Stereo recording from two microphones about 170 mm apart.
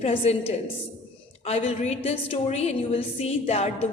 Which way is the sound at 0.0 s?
35° left (ahead or behind).